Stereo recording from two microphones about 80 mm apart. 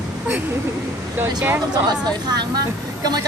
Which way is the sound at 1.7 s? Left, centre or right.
Right.